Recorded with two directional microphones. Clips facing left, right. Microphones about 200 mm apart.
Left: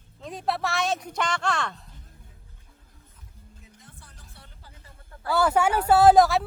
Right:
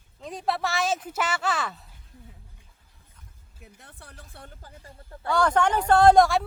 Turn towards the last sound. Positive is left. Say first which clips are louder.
# even
turn(degrees=0)  # may be behind; listen again after turning